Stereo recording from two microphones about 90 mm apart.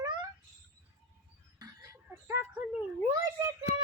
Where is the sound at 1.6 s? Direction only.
35° right (ahead or behind).